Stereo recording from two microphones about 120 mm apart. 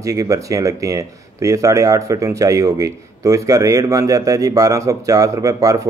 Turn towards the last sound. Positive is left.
turn(degrees=-25)  # may be behind; listen again after turning